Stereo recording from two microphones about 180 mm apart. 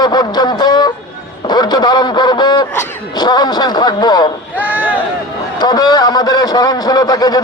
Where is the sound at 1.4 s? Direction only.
25° left (ahead or behind).